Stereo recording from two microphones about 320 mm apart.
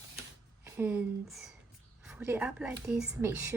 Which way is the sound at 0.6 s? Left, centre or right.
Centre.